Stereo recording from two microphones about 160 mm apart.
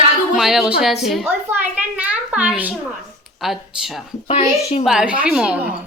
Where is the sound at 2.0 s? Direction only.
10° right (ahead or behind).